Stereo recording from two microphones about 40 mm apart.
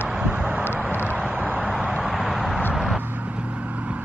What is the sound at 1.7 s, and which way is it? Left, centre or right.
Vehicle, centre.